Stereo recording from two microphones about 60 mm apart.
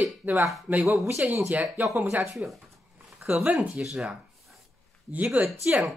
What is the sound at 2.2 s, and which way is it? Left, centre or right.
Speech, centre.